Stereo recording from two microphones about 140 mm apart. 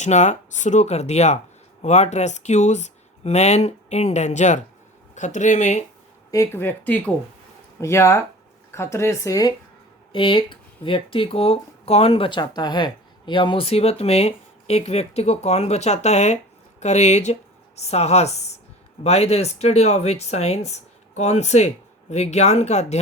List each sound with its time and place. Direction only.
0.0 s speech: 55° left (ahead or behind)
6.3 s speech: 20° left (ahead or behind)
10.1 s speech: 35° left (ahead or behind); by 23.0 s 55° left (ahead or behind)